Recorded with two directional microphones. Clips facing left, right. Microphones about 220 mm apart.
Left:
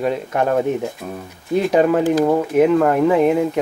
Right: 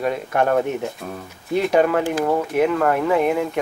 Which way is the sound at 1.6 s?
5° left (ahead or behind).